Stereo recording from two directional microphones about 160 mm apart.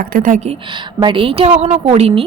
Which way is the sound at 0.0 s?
65° right (ahead or behind).